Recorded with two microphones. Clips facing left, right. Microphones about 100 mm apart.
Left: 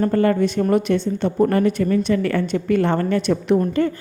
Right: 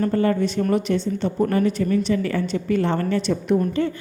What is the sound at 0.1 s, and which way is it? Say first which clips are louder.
A woman's voice: left 3 dB; 55° left (ahead or behind).